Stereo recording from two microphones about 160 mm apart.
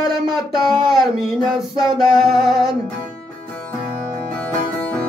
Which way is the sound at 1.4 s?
Centre (ahead or behind).